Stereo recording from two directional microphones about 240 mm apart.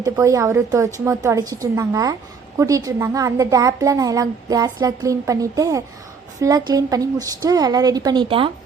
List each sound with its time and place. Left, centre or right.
0.0 s a woman's voice: centre